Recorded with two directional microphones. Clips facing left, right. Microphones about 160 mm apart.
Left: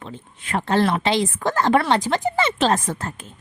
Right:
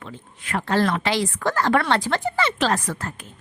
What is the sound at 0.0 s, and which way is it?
Speech, 25° left (ahead or behind).